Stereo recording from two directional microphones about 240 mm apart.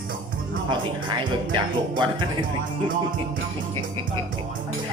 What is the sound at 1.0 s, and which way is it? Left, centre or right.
Speech, centre.